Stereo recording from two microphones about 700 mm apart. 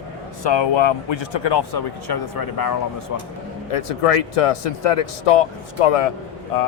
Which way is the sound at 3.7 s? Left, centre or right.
Left.